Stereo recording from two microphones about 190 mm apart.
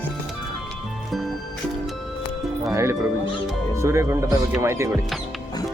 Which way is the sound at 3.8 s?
15° right (ahead or behind).